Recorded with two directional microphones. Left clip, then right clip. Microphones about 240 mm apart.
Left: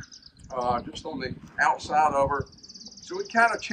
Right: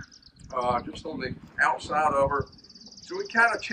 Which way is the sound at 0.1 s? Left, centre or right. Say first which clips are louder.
Left 4 dB; left.